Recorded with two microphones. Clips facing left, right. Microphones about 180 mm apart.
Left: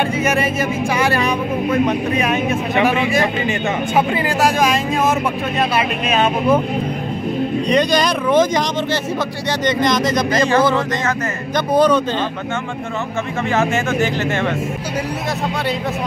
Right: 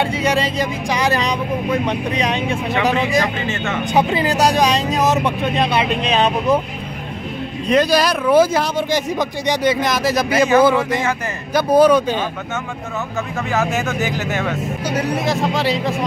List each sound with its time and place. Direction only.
0.6 s speech: 15° right (ahead or behind)
7.6 s speech: 5° right (ahead or behind)
13.5 s speech: centre (ahead or behind)